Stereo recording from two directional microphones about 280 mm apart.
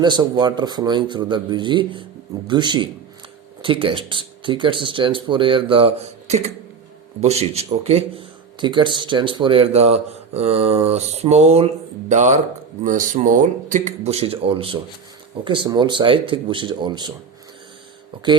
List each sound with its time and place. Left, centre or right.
0.0 s speech: centre